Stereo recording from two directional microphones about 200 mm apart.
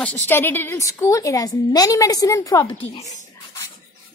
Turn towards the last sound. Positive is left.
turn(degrees=25)  # may be behind; listen again after turning